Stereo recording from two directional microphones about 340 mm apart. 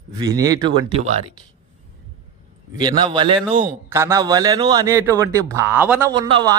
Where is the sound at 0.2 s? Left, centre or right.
Centre.